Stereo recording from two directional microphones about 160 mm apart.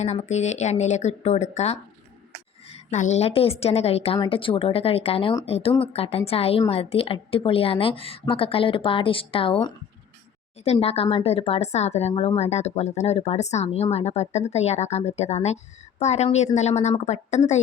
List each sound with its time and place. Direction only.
0.0 s a woman's voice: 45° left (ahead or behind)